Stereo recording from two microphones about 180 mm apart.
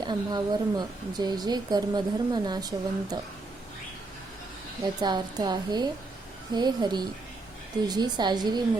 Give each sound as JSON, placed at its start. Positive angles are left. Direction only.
{"t": 0.0, "sound": "speech", "side_deg": -25}
{"t": 4.8, "sound": "speech", "side_deg": -20}